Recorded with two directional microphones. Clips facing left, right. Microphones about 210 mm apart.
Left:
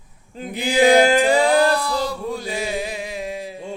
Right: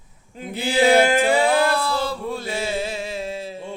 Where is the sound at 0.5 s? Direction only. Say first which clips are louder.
Left 2 dB; 15° left (ahead or behind).